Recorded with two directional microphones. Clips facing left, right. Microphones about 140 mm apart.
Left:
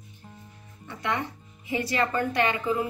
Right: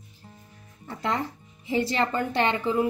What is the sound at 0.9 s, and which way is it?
A woman's voice, 30° right (ahead or behind).